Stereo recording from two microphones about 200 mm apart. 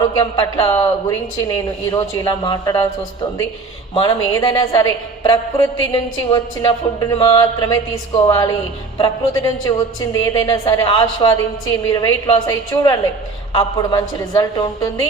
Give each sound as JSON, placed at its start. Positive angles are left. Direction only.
{"t": 0.2, "sound": "speech", "side_deg": 20}
{"t": 3.9, "sound": "a woman's voice", "side_deg": 20}